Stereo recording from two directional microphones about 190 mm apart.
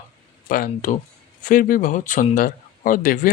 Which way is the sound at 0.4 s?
45° left (ahead or behind).